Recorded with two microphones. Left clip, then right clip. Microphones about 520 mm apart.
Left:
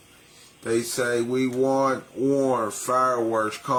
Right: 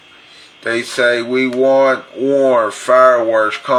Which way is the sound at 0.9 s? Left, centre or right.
Left.